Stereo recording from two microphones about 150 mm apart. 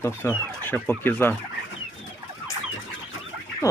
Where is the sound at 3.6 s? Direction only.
20° left (ahead or behind).